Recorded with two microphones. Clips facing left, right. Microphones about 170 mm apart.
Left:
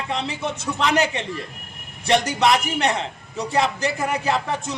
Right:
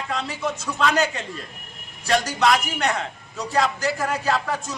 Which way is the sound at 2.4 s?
25° left (ahead or behind).